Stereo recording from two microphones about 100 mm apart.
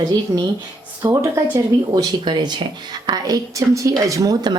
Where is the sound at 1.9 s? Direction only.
45° right (ahead or behind).